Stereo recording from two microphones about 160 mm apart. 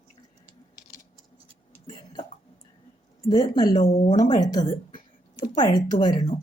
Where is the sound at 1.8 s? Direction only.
35° left (ahead or behind).